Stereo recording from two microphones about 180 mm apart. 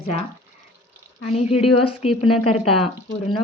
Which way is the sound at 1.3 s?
35° left (ahead or behind).